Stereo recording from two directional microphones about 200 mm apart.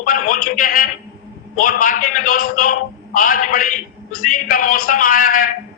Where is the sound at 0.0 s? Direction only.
45° left (ahead or behind).